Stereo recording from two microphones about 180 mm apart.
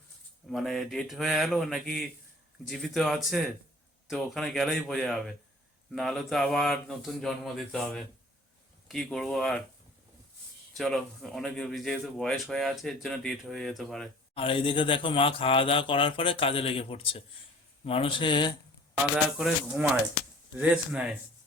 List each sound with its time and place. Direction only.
0.4 s speech: centre (ahead or behind)
10.8 s speech: centre (ahead or behind)
14.3 s speech: 30° left (ahead or behind)
19.4 s speech: 5° right (ahead or behind)